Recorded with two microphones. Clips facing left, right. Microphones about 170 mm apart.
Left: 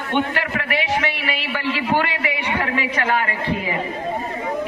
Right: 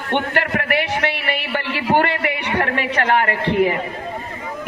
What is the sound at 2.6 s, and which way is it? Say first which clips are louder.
A man's voice: right 5 dB; 65° right (ahead or behind).